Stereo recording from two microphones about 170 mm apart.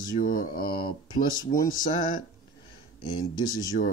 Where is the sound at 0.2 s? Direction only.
55° left (ahead or behind).